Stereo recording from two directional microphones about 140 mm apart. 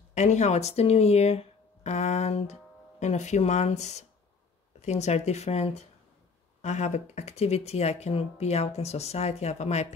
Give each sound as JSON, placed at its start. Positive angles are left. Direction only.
{"t": 0.1, "sound": "speech", "side_deg": 55}